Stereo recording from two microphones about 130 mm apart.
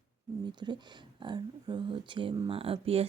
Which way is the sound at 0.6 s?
35° right (ahead or behind).